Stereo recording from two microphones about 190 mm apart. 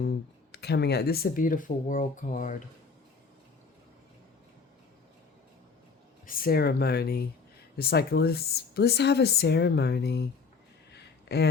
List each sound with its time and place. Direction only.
0.0 s speech: 60° left (ahead or behind); by 2.6 s 45° left (ahead or behind)
6.2 s speech: 50° left (ahead or behind)
10.9 s a sound: 60° left (ahead or behind)